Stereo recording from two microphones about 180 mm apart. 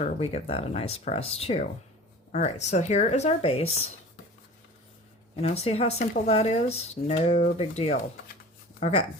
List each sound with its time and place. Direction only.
0.0 s speech: 35° left (ahead or behind)
5.4 s speech: 35° left (ahead or behind)